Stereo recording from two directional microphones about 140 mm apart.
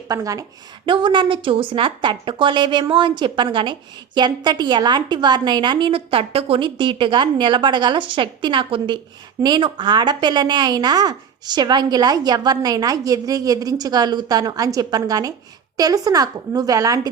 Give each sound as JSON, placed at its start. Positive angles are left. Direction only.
{"t": 0.1, "sound": "a woman's voice", "side_deg": -25}
{"t": 0.9, "sound": "a woman's voice", "side_deg": -35}